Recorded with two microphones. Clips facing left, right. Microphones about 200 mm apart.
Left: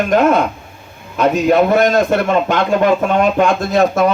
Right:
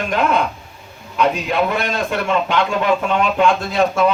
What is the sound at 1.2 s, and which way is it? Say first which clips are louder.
A man's voice: left 6 dB; 40° left (ahead or behind).